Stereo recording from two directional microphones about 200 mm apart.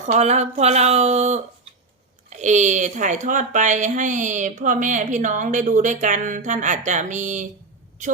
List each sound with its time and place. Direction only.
0.1 s speech: 35° right (ahead or behind)